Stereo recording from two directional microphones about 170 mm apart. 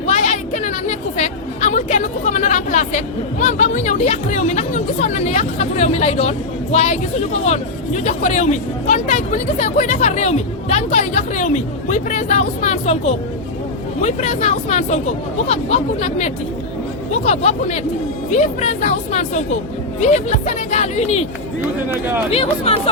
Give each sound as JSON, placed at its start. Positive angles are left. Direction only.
{"t": 0.0, "sound": "a sound", "side_deg": 45}
{"t": 3.4, "sound": "speech", "side_deg": 45}
{"t": 22.3, "sound": "speech", "side_deg": 35}